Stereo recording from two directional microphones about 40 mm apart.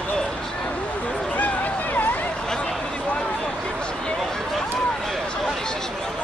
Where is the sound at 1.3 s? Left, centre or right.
Left.